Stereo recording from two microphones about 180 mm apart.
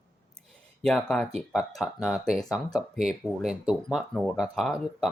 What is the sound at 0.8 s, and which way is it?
Speech, 5° left (ahead or behind).